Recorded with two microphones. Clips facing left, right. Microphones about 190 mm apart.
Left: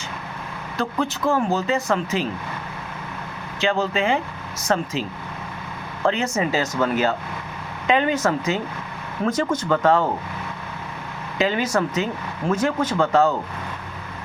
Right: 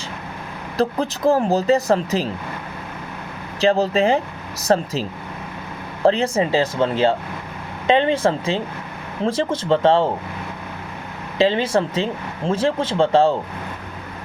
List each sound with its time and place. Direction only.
0.8 s speech: 35° right (ahead or behind)
3.6 s speech: 35° right (ahead or behind)
11.3 s speech: 30° right (ahead or behind)